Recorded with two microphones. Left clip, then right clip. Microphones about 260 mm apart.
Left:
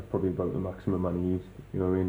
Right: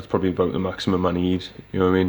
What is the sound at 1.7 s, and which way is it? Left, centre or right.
Speech, right.